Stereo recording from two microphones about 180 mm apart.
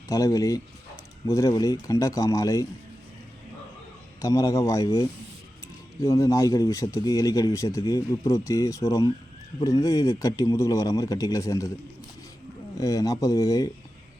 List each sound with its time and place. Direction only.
0.1 s speech: 20° left (ahead or behind)
4.2 s speech: 20° left (ahead or behind)
12.7 s speech: 20° left (ahead or behind)